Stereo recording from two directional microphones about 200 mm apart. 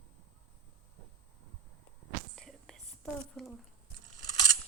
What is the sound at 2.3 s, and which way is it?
Whispering, centre (ahead or behind).